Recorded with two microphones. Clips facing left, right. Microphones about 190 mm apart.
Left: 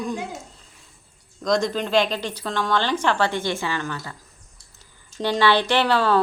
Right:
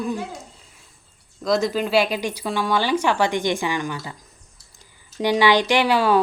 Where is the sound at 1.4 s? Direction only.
5° right (ahead or behind).